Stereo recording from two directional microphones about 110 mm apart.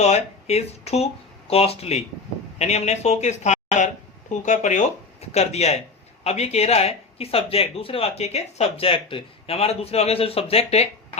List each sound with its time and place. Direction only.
0.0 s speech: 80° left
2.6 s speech: 85° left
5.3 s speech: 75° left (ahead or behind)